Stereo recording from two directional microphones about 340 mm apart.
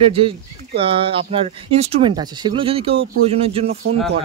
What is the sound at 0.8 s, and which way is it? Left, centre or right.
Speech, centre.